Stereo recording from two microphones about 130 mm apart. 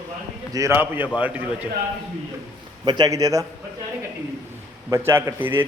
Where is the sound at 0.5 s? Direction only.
20° right (ahead or behind).